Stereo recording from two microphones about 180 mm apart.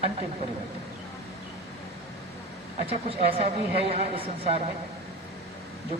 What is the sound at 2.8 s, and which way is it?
A woman's voice, 35° right (ahead or behind).